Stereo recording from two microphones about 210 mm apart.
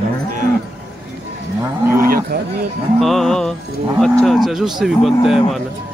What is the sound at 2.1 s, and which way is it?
Speech, 45° right (ahead or behind).